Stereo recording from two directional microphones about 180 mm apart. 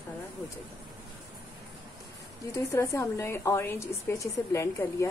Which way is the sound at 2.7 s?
15° left (ahead or behind).